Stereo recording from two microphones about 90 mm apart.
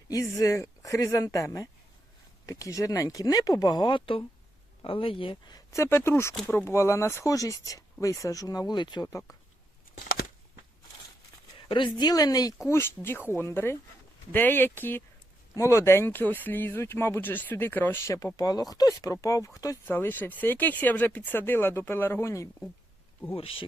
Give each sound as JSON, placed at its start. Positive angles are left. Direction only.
{"t": 0.1, "sound": "speech", "side_deg": 40}
{"t": 4.8, "sound": "speech", "side_deg": 80}
{"t": 5.7, "sound": "speech", "side_deg": 30}
{"t": 9.0, "sound": "speech", "side_deg": 35}
{"t": 11.9, "sound": "speech", "side_deg": 45}
{"t": 12.6, "sound": "speech", "side_deg": 30}
{"t": 18.3, "sound": "speech", "side_deg": 45}
{"t": 19.8, "sound": "speech", "side_deg": 25}
{"t": 23.3, "sound": "speech", "side_deg": 90}